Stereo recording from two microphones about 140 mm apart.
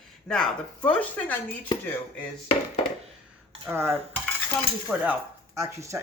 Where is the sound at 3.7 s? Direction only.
15° right (ahead or behind).